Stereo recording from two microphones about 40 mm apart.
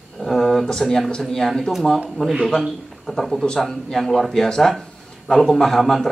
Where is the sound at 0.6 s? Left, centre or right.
Centre.